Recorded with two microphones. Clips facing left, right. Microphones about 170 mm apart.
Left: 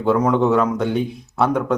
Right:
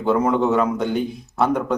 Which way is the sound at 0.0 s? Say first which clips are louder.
Left 2 dB; centre (ahead or behind).